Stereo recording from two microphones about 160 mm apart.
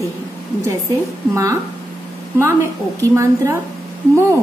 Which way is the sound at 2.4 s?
20° right (ahead or behind).